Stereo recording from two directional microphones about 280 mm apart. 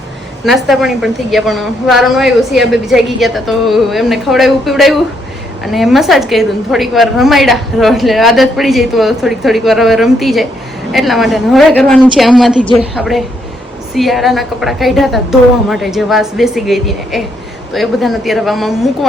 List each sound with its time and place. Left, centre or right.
0.4 s a woman's voice: centre